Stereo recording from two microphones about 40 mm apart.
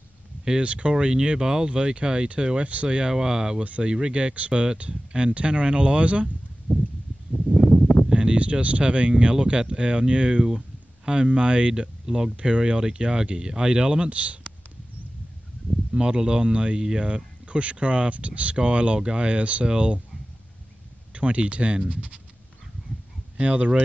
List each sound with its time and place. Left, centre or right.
0.5 s speech: right
8.1 s a sound: right
8.4 s speech: right
15.9 s speech: right
21.1 s speech: right
23.3 s speech: right